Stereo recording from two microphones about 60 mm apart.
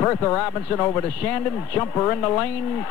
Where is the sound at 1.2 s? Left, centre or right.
Left.